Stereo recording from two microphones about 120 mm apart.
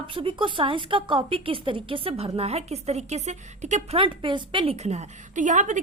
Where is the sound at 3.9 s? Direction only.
45° right (ahead or behind); by 5.8 s 90° right.